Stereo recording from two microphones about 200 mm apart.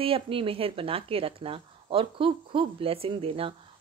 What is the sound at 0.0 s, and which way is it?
Speech, 25° right (ahead or behind).